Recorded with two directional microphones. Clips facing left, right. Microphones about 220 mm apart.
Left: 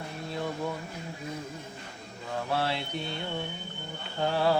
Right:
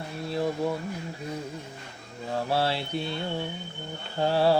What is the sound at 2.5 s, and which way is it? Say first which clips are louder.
Mantra: right 3 dB; 35° right (ahead or behind).